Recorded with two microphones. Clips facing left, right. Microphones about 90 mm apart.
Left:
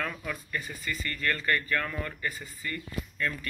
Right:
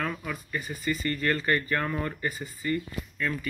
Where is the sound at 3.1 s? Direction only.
5° right (ahead or behind).